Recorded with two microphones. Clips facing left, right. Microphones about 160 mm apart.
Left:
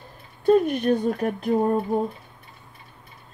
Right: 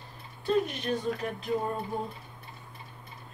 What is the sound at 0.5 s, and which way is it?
Speech, 55° left (ahead or behind).